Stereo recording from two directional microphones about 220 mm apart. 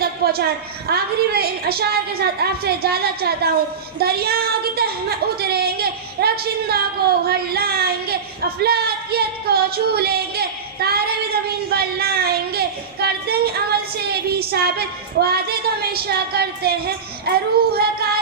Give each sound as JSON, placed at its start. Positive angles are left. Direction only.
{"t": 0.0, "sound": "a woman's voice", "side_deg": -45}